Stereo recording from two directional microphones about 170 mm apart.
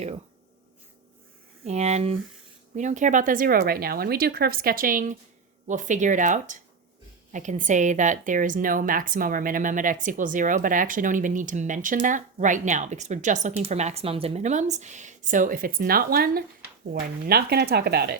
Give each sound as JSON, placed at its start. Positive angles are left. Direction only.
{"t": 1.6, "sound": "a woman's voice", "side_deg": -40}